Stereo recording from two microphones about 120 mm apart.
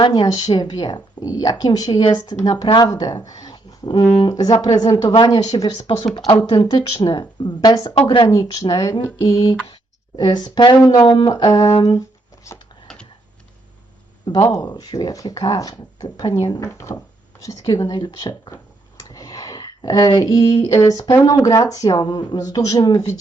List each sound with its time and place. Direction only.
0.0 s speech: 40° left (ahead or behind)
3.2 s a sound: 30° left (ahead or behind)
4.2 s speech: 35° left (ahead or behind)
14.4 s speech: 30° left (ahead or behind)
17.4 s a sound: 30° left (ahead or behind)
20.2 s speech: 30° left (ahead or behind)